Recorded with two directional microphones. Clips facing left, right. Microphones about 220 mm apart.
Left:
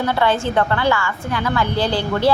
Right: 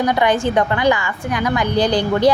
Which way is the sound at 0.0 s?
15° right (ahead or behind).